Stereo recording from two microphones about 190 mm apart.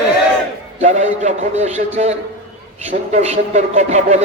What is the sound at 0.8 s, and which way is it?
Speech, 40° right (ahead or behind).